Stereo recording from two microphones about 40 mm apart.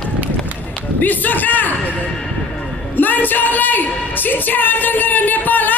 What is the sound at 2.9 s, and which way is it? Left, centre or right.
Speech, left.